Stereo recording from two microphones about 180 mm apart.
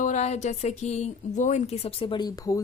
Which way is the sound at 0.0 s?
40° left (ahead or behind).